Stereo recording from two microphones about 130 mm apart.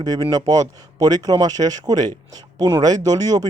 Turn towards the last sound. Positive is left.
turn(degrees=-30)  # may be behind; listen again after turning